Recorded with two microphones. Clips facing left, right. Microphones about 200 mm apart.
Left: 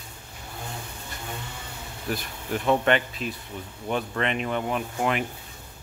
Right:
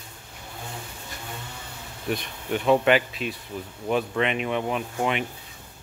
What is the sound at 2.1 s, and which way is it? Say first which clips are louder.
Speech: right 2 dB; centre (ahead or behind).